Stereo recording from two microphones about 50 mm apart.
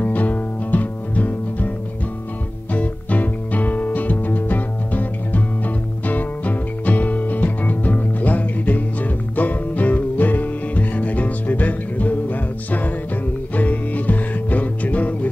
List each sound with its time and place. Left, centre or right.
0.0 s music: left
2.7 s music: left